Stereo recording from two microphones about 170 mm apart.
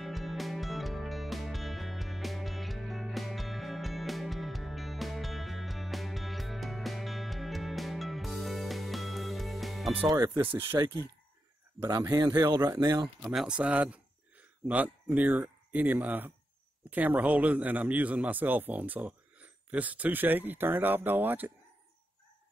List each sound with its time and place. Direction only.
0.0 s music: centre (ahead or behind)
10.0 s a man's voice: 20° right (ahead or behind)
11.8 s a man's voice: 20° right (ahead or behind)
13.2 s a man's voice: 5° right (ahead or behind)